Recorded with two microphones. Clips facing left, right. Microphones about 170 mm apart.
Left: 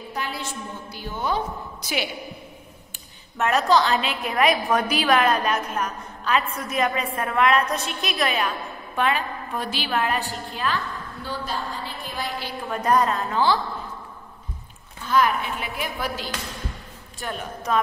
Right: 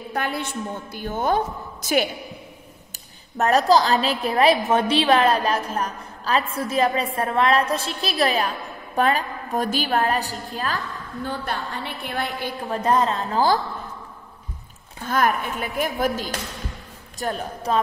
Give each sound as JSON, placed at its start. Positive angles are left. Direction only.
{"t": 0.1, "sound": "a woman's voice", "side_deg": -55}
{"t": 3.3, "sound": "a woman's voice", "side_deg": -35}
{"t": 11.2, "sound": "a woman's voice", "side_deg": -65}
{"t": 12.6, "sound": "a woman's voice", "side_deg": -30}
{"t": 15.0, "sound": "a woman's voice", "side_deg": -50}